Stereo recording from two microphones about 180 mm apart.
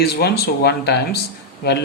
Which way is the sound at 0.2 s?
65° left (ahead or behind).